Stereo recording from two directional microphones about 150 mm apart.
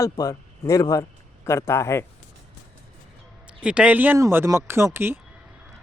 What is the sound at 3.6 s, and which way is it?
A man's voice, 10° right (ahead or behind).